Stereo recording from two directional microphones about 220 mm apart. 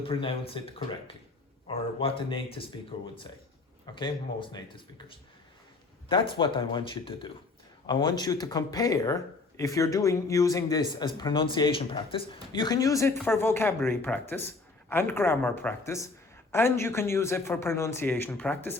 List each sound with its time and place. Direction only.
0.0 s speech: 25° left (ahead or behind); by 18.8 s 10° left (ahead or behind)